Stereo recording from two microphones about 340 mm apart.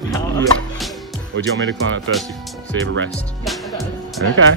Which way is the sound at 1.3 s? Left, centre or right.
Right.